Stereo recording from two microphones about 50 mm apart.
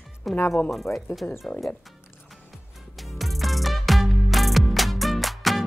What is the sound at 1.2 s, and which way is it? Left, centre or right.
Speech, left.